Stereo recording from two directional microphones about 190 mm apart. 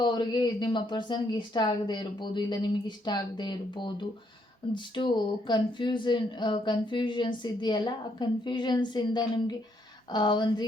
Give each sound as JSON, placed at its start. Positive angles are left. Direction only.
{"t": 0.0, "sound": "speech", "side_deg": 25}